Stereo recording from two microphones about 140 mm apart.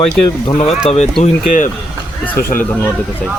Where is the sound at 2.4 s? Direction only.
90° left.